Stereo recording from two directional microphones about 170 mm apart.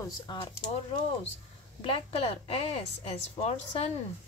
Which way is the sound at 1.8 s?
35° left (ahead or behind).